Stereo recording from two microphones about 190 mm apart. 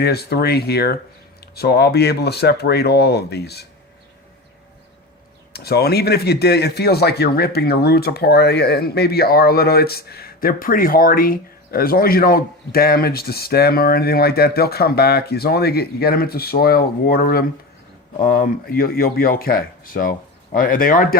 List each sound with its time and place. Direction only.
0.0 s speech: 55° left (ahead or behind)
5.5 s speech: 55° left (ahead or behind)